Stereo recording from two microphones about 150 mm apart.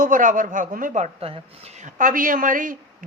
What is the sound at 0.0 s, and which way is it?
Speech, 65° right (ahead or behind).